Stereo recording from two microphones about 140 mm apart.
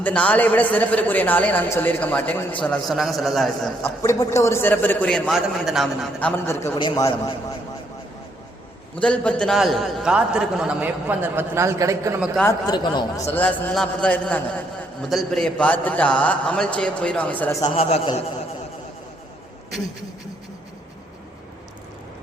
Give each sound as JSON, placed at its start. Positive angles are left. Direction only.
{"t": 0.0, "sound": "a man's voice", "side_deg": 10}
{"t": 2.8, "sound": "a man's voice", "side_deg": 0}
{"t": 3.8, "sound": "a man's voice", "side_deg": 20}
{"t": 6.1, "sound": "a man's voice", "side_deg": 15}
{"t": 6.7, "sound": "a man's voice", "side_deg": 35}
{"t": 9.0, "sound": "a man's voice", "side_deg": 10}
{"t": 12.5, "sound": "speech", "side_deg": 30}
{"t": 13.3, "sound": "a man's voice", "side_deg": 10}
{"t": 17.7, "sound": "a man's voice", "side_deg": 45}